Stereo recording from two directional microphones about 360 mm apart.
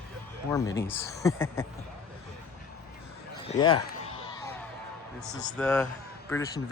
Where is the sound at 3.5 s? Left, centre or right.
Centre.